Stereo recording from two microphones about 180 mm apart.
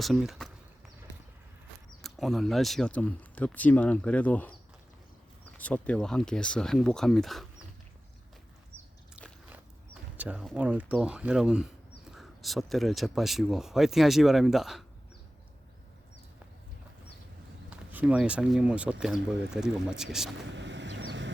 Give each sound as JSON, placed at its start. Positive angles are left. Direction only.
{"t": 0.0, "sound": "speech", "side_deg": 0}
{"t": 2.0, "sound": "speech", "side_deg": 0}
{"t": 10.2, "sound": "speech", "side_deg": -10}
{"t": 17.7, "sound": "speech", "side_deg": -5}
{"t": 20.5, "sound": "vehicle", "side_deg": -80}